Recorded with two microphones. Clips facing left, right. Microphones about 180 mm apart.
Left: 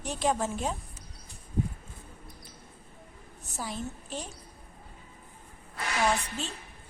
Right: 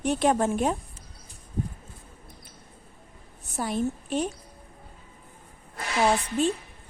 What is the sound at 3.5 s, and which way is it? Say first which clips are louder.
Speech: right 9 dB; 60° right (ahead or behind).